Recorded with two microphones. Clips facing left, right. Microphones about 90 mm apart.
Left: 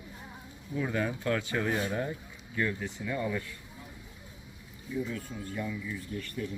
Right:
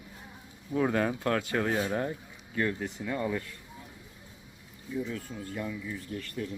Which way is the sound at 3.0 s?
30° right (ahead or behind).